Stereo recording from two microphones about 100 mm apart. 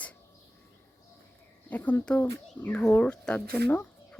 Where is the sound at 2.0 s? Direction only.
15° left (ahead or behind).